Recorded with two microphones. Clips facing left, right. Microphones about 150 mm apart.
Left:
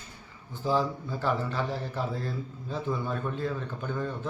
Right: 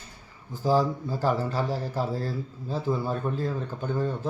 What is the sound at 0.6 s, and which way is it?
Speech, 40° right (ahead or behind).